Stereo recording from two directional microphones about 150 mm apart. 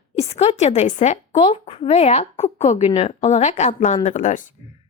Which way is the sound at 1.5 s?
40° left (ahead or behind).